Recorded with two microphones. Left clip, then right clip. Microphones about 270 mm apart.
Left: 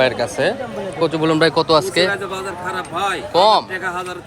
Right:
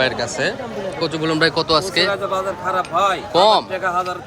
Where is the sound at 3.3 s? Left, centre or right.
Centre.